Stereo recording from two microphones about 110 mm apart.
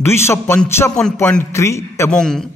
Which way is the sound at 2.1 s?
5° left (ahead or behind).